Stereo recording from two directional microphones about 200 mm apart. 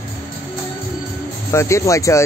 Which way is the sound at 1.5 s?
15° left (ahead or behind).